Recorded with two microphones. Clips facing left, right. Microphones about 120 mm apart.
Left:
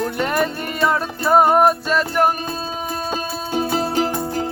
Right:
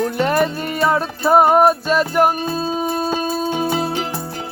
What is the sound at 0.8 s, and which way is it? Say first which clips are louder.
Music: right 2 dB; 5° right (ahead or behind).